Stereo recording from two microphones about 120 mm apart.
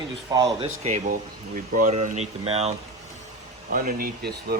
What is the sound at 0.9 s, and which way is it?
Speech, 80° right.